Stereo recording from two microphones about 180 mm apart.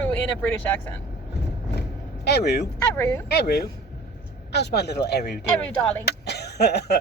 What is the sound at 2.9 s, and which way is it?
Speech, 10° left (ahead or behind).